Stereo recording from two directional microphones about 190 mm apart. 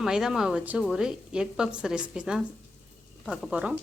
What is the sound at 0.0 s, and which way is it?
A woman's voice, centre (ahead or behind).